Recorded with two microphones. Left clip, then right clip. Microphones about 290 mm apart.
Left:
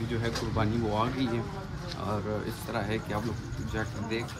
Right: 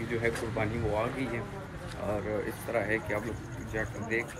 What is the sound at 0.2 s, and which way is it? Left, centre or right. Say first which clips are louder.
Speech: even; centre.